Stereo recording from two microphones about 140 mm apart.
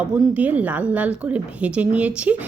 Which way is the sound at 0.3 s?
10° right (ahead or behind).